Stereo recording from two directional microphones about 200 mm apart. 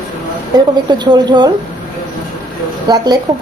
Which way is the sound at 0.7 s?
20° right (ahead or behind).